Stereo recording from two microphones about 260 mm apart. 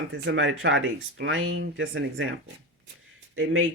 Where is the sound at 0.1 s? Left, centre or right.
Right.